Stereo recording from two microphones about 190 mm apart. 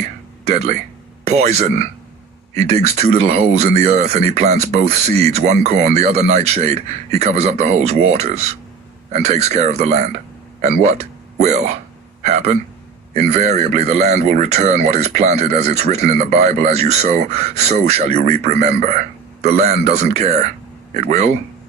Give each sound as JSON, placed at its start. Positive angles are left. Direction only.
{"t": 0.4, "sound": "speech", "side_deg": -35}